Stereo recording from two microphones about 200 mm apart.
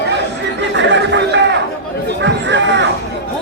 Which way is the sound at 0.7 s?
65° right (ahead or behind).